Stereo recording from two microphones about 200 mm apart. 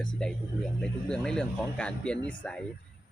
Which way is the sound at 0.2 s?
5° left (ahead or behind).